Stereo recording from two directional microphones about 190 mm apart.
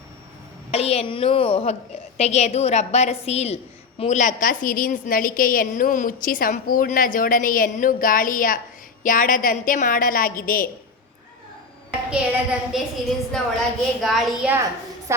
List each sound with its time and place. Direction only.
0.7 s a woman's voice: 35° left (ahead or behind)
12.1 s a woman's voice: 5° right (ahead or behind)